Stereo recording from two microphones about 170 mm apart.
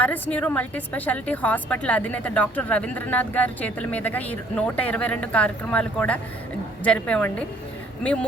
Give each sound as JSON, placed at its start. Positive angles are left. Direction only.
{"t": 0.0, "sound": "a woman's voice", "side_deg": 10}